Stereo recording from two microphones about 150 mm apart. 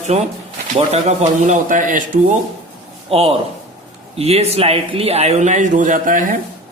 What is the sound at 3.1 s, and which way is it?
A man's voice, 40° right (ahead or behind).